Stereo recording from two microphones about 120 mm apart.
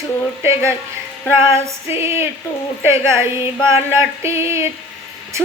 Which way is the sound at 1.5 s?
20° right (ahead or behind).